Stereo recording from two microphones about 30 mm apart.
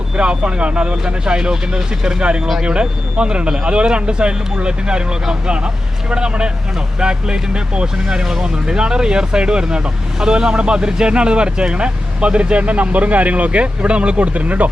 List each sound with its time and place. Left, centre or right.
0.2 s speech: right
1.2 s speech: right
8.2 s speech: centre
8.6 s speech: right